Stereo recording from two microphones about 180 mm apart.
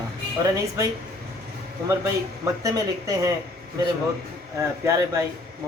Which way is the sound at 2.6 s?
20° right (ahead or behind).